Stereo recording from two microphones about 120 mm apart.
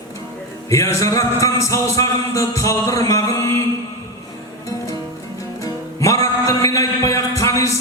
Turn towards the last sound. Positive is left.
turn(degrees=25)  # may be behind; listen again after turning